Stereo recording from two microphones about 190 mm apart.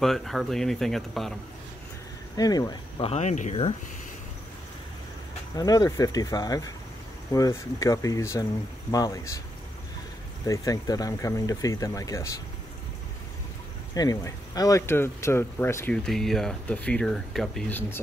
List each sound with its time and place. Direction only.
0.0 s speech: centre (ahead or behind)
2.3 s speech: 20° left (ahead or behind)
5.6 s speech: 20° left (ahead or behind)
10.4 s speech: 20° left (ahead or behind)
13.9 s speech: 20° left (ahead or behind)